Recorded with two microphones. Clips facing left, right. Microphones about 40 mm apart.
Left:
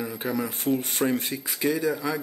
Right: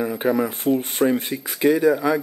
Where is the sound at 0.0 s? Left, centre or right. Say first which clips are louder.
Right 8 dB; right.